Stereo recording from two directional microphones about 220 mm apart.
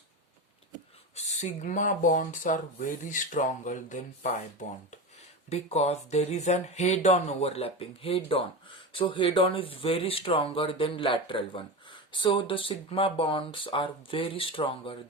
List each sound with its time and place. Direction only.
1.1 s speech: 30° left (ahead or behind)
5.5 s speech: 30° left (ahead or behind)